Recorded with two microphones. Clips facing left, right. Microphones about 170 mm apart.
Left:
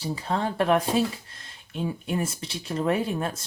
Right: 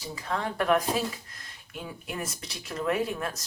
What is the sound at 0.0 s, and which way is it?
Speech, 30° left (ahead or behind).